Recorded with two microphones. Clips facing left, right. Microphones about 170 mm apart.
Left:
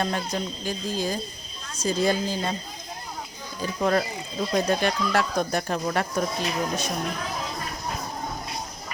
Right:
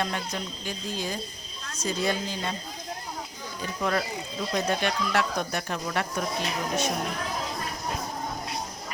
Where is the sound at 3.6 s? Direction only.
35° left (ahead or behind).